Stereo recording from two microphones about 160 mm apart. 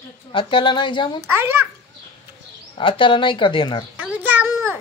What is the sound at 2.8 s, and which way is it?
A woman's voice, 30° left (ahead or behind).